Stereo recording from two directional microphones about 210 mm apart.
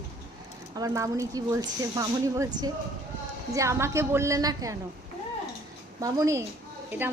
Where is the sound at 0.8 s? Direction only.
15° right (ahead or behind).